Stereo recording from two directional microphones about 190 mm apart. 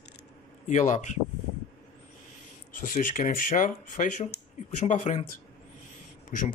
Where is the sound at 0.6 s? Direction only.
40° left (ahead or behind).